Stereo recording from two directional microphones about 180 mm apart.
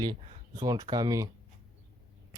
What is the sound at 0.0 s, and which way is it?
Speech, 20° right (ahead or behind).